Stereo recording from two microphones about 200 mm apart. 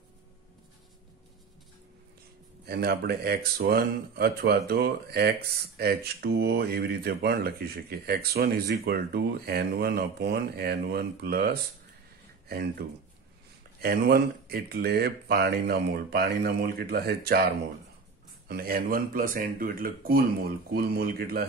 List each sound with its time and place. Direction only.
2.6 s speech: 55° right (ahead or behind)